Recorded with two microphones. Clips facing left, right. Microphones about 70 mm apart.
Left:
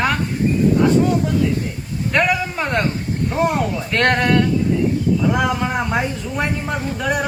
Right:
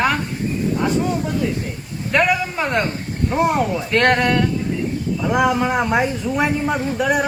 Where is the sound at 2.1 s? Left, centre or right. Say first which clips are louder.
Right 1 dB; centre.